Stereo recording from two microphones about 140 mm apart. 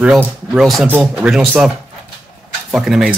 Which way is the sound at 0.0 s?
5° right (ahead or behind).